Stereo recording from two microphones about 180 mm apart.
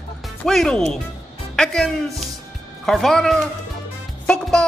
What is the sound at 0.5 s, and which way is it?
Music, centre (ahead or behind).